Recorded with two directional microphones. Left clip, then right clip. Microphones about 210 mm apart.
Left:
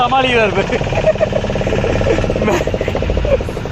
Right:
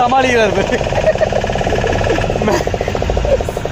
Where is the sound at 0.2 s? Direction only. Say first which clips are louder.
Right 1 dB; 10° right (ahead or behind).